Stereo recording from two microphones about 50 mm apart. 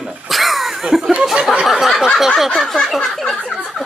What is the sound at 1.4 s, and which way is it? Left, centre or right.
Speech, centre.